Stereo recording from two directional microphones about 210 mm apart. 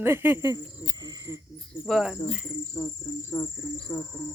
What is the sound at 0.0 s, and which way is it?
Speech, 10° right (ahead or behind).